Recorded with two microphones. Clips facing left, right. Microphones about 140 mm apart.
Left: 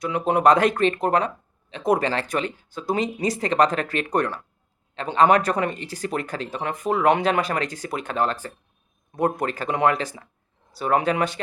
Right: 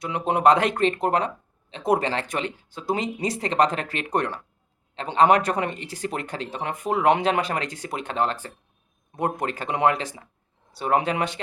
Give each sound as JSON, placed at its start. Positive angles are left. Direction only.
{"t": 0.0, "sound": "speech", "side_deg": -30}